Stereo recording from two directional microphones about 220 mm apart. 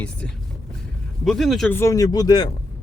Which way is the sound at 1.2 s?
Centre (ahead or behind).